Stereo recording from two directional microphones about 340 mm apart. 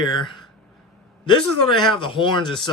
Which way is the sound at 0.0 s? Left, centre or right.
Centre.